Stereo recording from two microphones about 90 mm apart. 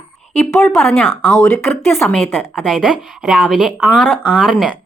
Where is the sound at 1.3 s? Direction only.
10° left (ahead or behind).